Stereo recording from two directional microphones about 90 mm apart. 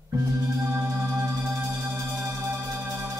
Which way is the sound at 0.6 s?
25° right (ahead or behind).